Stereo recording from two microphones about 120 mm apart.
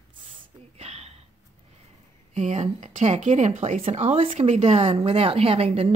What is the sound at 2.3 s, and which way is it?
A woman's voice, 75° right (ahead or behind).